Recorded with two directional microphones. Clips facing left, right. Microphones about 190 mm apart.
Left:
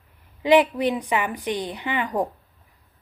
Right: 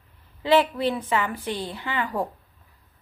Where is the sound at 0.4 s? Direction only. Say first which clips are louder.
Left 3 dB; 15° left (ahead or behind).